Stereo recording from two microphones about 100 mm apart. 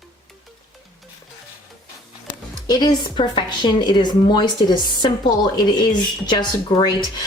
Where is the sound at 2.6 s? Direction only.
45° left (ahead or behind).